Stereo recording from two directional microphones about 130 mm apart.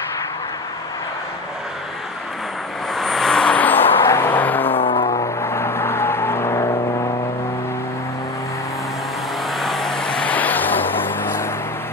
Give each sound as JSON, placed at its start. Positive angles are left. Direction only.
{"t": 2.9, "sound": "vehicle", "side_deg": 0}
{"t": 4.6, "sound": "vehicle", "side_deg": 45}
{"t": 5.4, "sound": "vehicle", "side_deg": 20}
{"t": 9.6, "sound": "vehicle", "side_deg": 0}